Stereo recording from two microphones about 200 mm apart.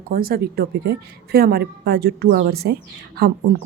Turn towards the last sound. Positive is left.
turn(degrees=-50)  # may be behind; listen again after turning